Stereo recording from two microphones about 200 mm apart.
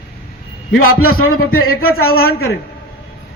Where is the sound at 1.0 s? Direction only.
90° left.